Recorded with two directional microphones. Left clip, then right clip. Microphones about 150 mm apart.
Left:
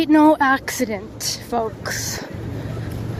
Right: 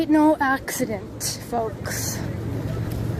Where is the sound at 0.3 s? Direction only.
30° left (ahead or behind).